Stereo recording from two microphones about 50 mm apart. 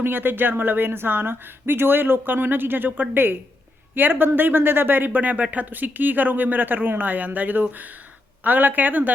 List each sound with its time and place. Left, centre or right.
0.0 s speech: right